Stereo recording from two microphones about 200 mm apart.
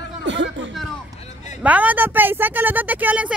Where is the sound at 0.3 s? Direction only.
65° right (ahead or behind).